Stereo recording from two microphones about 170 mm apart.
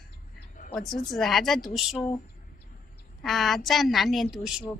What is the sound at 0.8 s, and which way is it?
Speech, 55° left (ahead or behind).